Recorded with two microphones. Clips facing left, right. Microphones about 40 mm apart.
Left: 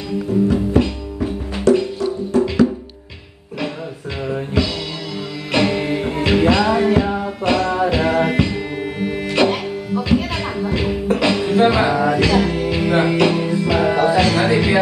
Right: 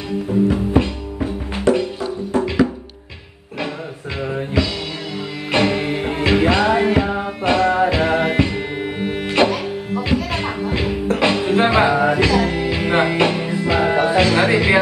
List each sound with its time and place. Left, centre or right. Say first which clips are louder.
0.3 s music: even; right
5.5 s music: even; right